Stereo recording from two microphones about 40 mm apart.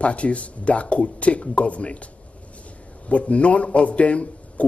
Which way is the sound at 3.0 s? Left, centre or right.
Left.